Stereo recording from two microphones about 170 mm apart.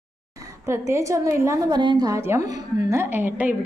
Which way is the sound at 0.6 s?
15° right (ahead or behind).